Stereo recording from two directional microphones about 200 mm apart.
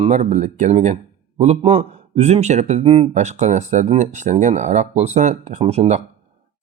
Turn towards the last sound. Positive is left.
turn(degrees=-30)  # may be behind; listen again after turning